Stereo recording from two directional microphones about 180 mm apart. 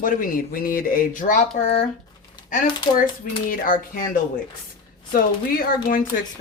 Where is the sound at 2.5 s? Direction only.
45° left (ahead or behind).